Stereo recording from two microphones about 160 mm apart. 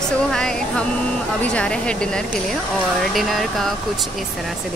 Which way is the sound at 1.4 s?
5° left (ahead or behind).